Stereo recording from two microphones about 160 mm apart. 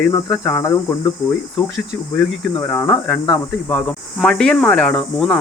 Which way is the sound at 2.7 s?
5° left (ahead or behind).